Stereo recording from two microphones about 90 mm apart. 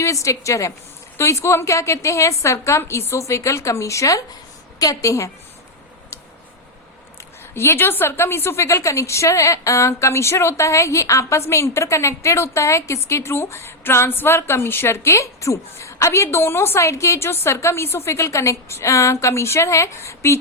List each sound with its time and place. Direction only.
0.0 s a woman's voice: 35° left (ahead or behind)
7.5 s a woman's voice: 25° left (ahead or behind)